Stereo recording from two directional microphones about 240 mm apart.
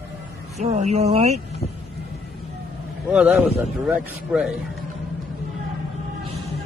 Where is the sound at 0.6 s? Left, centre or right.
Right.